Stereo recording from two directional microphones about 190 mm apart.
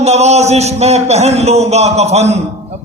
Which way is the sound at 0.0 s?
35° right (ahead or behind).